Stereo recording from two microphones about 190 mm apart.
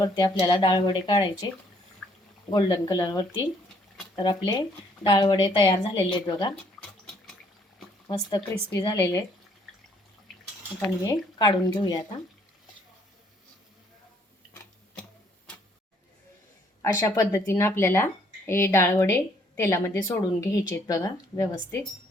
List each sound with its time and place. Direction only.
0.0 s speech: 20° left (ahead or behind)
2.5 s speech: 20° left (ahead or behind)
8.0 s speech: 20° left (ahead or behind)
10.8 s speech: 20° left (ahead or behind)
16.8 s speech: 15° left (ahead or behind)